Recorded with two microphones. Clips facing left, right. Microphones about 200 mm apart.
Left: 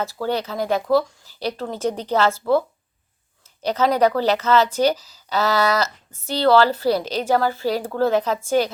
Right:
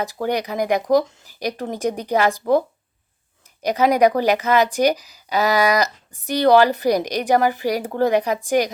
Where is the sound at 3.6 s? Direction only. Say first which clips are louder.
Right 2 dB; 15° right (ahead or behind).